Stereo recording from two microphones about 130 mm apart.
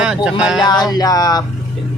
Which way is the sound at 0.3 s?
5° right (ahead or behind).